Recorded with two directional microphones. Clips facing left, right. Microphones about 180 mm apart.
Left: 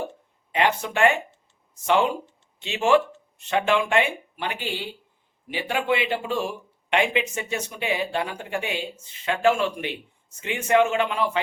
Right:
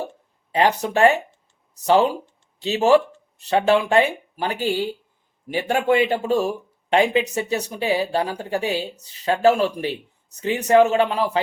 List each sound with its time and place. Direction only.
0.5 s speech: 35° right (ahead or behind)